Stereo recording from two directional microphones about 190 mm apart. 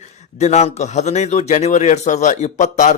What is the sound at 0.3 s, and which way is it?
Speech, 35° left (ahead or behind).